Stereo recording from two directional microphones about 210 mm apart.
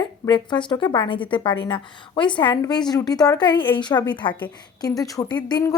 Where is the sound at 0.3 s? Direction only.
20° left (ahead or behind).